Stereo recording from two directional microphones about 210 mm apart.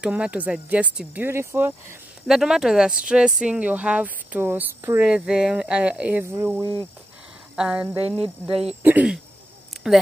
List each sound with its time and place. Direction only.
0.0 s speech: 5° right (ahead or behind)
8.2 s speech: 25° right (ahead or behind)
8.8 s speech: 5° right (ahead or behind)